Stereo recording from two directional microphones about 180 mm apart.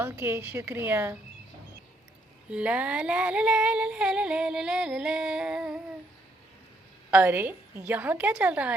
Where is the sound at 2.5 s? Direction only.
5° right (ahead or behind).